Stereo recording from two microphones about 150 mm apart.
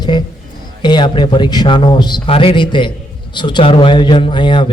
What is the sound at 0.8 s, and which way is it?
A man's voice, 30° left (ahead or behind).